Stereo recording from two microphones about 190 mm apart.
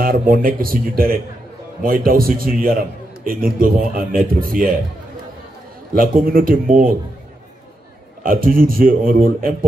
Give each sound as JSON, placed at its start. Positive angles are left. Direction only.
{"t": 0.3, "sound": "a man's voice", "side_deg": -50}
{"t": 5.9, "sound": "a man's voice", "side_deg": -50}
{"t": 8.2, "sound": "a man's voice", "side_deg": -50}